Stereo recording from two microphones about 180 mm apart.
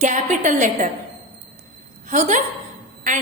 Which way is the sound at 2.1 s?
40° right (ahead or behind).